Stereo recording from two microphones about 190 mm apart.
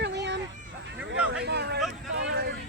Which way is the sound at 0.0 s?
65° right (ahead or behind).